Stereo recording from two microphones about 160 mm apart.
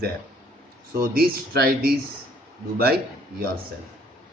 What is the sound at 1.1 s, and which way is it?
Speech, 70° right (ahead or behind).